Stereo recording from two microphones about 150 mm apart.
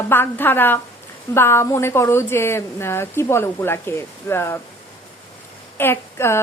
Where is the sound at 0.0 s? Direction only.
15° left (ahead or behind).